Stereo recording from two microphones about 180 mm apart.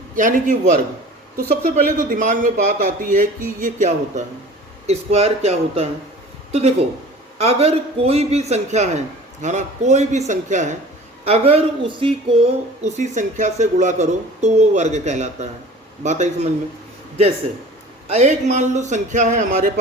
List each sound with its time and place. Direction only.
0.2 s a man's voice: 50° right (ahead or behind); by 12.1 s 30° right (ahead or behind)
12.8 s a man's voice: 45° right (ahead or behind)
18.1 s a man's voice: 40° right (ahead or behind)